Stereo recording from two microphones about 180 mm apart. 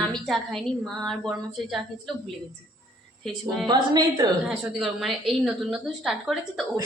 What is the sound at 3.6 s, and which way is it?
Speech, 25° right (ahead or behind).